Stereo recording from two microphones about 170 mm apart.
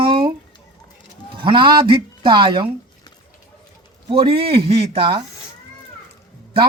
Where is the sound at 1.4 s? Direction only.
30° right (ahead or behind).